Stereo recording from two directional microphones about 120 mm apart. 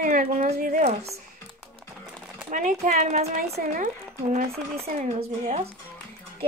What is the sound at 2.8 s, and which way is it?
A woman's voice, 75° right (ahead or behind).